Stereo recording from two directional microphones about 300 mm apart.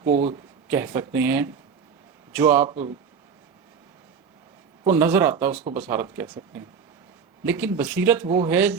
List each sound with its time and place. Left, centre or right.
0.7 s speech: centre
2.6 s speech: centre
4.9 s speech: centre